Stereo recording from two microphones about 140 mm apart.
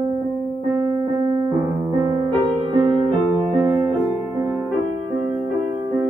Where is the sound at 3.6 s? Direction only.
25° right (ahead or behind).